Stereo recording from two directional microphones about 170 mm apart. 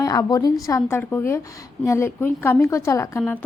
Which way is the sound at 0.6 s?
15° left (ahead or behind).